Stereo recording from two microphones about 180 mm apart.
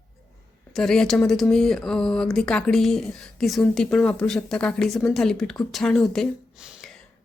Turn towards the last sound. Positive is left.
turn(degrees=0)  # may be behind; listen again after turning